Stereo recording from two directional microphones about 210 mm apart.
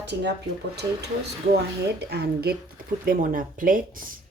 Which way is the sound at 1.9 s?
50° right (ahead or behind).